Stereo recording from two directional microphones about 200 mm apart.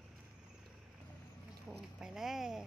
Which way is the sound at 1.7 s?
5° right (ahead or behind).